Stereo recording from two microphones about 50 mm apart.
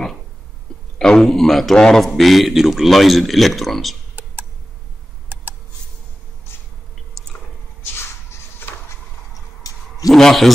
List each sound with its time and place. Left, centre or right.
0.9 s a man's voice: centre
4.1 s a sound: right
7.2 s chewing: centre
10.1 s a man's voice: centre